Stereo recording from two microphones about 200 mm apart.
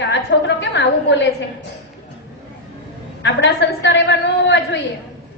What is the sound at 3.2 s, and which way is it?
A woman's voice, 65° left (ahead or behind).